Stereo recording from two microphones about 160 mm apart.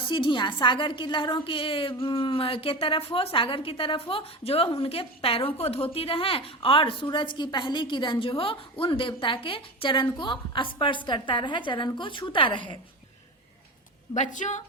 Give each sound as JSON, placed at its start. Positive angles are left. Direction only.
{"t": 0.1, "sound": "a woman's voice", "side_deg": 30}
{"t": 14.2, "sound": "a woman's voice", "side_deg": 50}